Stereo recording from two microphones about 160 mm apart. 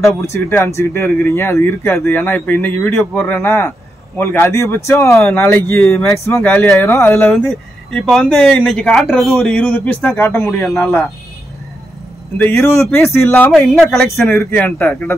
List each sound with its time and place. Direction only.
0.2 s speech: 15° left (ahead or behind)
12.4 s speech: 15° left (ahead or behind)
13.5 s speech: centre (ahead or behind)